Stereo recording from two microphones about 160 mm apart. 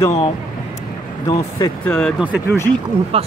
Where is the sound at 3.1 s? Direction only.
40° right (ahead or behind).